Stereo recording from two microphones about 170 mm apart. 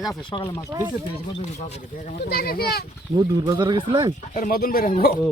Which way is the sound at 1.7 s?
45° left (ahead or behind).